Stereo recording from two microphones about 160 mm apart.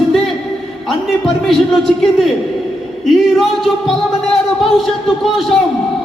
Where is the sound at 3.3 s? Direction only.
Centre (ahead or behind).